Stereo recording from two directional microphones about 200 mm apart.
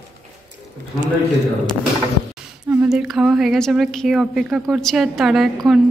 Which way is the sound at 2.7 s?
5° right (ahead or behind).